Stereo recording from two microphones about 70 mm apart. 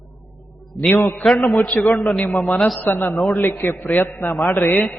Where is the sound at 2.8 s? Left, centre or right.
Left.